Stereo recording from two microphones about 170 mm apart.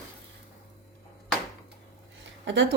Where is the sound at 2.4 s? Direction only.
90° right.